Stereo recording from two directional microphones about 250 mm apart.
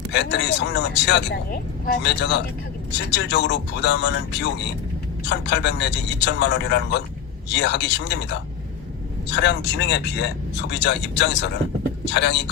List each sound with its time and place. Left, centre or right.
0.1 s speech: left